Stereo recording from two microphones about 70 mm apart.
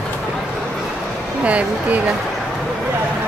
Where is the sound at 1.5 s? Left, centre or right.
Centre.